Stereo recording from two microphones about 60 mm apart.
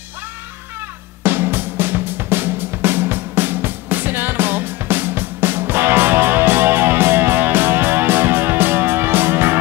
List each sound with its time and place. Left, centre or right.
1.2 s music: right